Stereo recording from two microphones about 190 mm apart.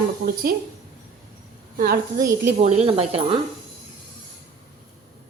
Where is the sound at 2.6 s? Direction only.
35° right (ahead or behind).